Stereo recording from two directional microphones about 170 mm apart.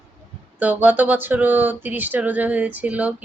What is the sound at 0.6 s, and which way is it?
Speech, 10° right (ahead or behind).